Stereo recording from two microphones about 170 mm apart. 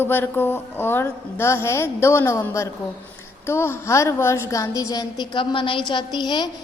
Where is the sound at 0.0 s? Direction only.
10° left (ahead or behind).